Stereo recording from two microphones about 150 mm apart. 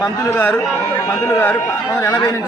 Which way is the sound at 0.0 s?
20° left (ahead or behind).